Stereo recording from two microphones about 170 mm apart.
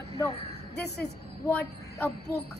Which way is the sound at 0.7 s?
75° left (ahead or behind).